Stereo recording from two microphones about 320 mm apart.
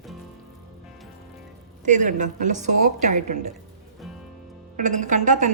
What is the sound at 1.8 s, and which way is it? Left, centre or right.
A woman's voice, right.